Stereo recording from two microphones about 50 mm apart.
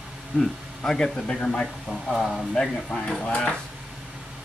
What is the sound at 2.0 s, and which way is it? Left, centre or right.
Speech, centre.